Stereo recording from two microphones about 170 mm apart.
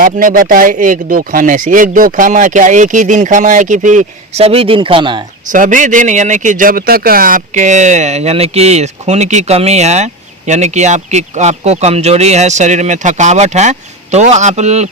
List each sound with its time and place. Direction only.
0.0 s speech: 55° right (ahead or behind); by 5.2 s 30° right (ahead or behind)
5.5 s speech: 50° right (ahead or behind)